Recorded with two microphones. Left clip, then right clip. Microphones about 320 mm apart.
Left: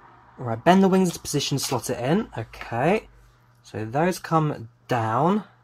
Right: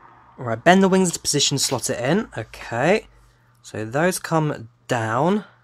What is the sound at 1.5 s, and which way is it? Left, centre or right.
Speech, right.